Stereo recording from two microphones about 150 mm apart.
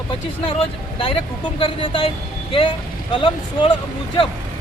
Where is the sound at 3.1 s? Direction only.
30° left (ahead or behind).